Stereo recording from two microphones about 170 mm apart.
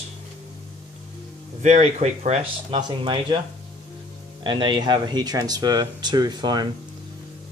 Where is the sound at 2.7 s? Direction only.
30° right (ahead or behind).